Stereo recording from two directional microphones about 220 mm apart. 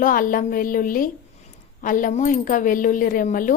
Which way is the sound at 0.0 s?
40° left (ahead or behind).